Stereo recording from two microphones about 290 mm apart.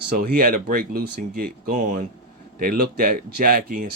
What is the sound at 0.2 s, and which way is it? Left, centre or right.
Speech, right.